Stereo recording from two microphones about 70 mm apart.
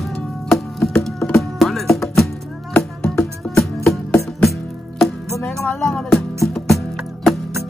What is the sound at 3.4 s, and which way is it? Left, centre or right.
Music, centre.